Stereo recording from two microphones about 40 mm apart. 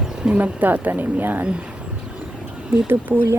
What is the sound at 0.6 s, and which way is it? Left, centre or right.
Speech, right.